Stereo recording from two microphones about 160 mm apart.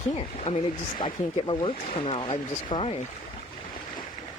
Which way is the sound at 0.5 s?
50° left (ahead or behind).